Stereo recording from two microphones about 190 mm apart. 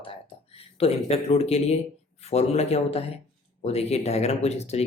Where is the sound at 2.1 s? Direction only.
35° left (ahead or behind).